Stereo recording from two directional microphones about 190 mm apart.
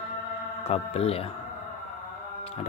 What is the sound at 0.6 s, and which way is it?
Speech, 30° left (ahead or behind).